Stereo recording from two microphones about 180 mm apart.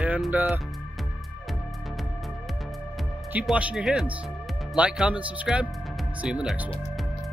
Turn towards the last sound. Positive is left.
turn(degrees=-5)  # may be behind; listen again after turning